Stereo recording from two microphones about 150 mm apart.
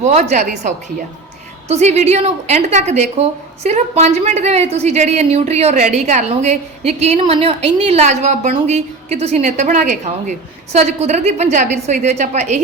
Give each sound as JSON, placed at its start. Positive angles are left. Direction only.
{"t": 0.0, "sound": "a woman's voice", "side_deg": -50}